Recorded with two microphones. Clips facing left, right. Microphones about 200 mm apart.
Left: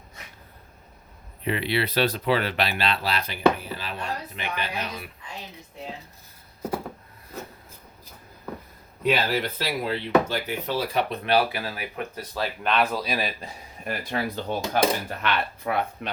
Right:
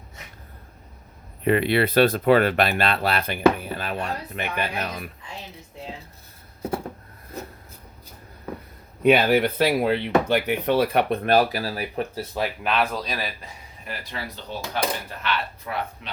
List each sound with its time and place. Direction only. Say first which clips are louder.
1.5 s speech: right 6 dB; 50° right (ahead or behind)
9.0 s speech: right 7 dB; 60° right (ahead or behind); by 12.5 s 25° right (ahead or behind)
12.6 s speech: left 3 dB; centre (ahead or behind)
13.8 s speech: left 6 dB; 50° left (ahead or behind)